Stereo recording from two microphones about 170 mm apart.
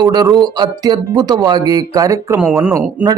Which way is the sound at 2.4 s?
5° right (ahead or behind).